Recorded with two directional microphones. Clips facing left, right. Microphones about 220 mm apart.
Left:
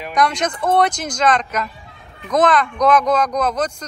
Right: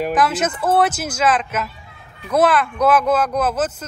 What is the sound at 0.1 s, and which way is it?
Speech, 5° right (ahead or behind).